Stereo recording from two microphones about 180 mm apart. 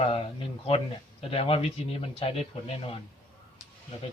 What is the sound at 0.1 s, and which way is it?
A man's voice, 30° left (ahead or behind).